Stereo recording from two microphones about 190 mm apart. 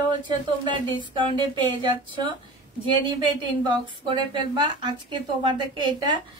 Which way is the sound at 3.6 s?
25° right (ahead or behind).